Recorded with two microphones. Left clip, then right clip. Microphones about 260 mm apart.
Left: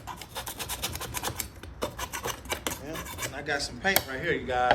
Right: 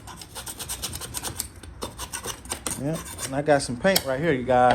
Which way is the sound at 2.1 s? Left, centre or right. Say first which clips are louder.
Left 1 dB; centre.